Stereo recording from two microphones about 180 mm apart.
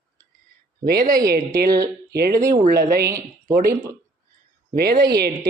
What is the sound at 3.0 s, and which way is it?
Speech, 15° right (ahead or behind).